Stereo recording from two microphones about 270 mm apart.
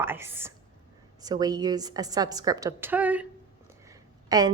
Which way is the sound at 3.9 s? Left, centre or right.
Centre.